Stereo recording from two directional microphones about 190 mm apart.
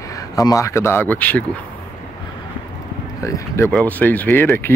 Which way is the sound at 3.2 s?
15° left (ahead or behind).